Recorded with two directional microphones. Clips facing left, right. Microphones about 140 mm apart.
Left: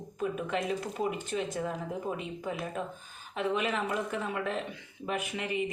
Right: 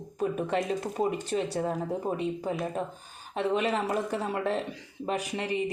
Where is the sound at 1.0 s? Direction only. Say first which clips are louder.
Right 6 dB; 35° right (ahead or behind).